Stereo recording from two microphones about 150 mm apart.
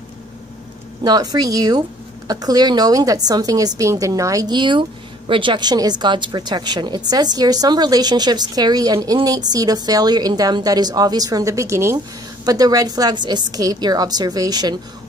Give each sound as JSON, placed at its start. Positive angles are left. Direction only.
{"t": 1.0, "sound": "a woman's voice", "side_deg": -25}